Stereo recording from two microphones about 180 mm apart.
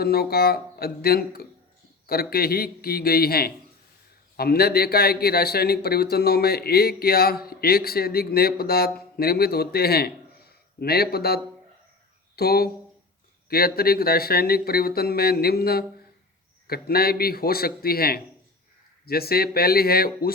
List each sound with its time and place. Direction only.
0.0 s a man's voice: 60° left (ahead or behind)
12.4 s speech: 60° left (ahead or behind)